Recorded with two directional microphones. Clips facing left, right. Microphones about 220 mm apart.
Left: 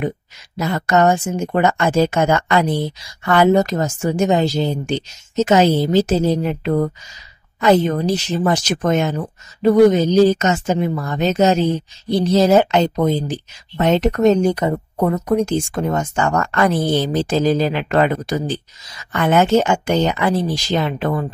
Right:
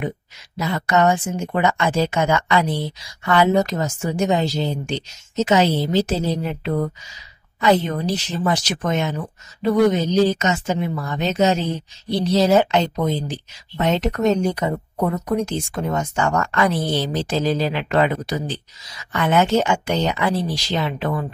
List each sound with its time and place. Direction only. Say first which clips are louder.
0.6 s speech: left 3 dB; 45° left (ahead or behind)